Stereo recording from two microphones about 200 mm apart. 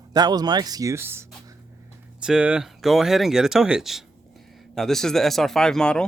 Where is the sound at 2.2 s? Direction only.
5° right (ahead or behind).